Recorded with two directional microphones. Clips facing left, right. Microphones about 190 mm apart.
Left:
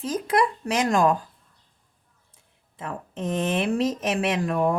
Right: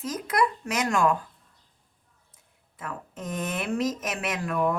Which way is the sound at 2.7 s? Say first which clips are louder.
Left 4 dB; 30° left (ahead or behind).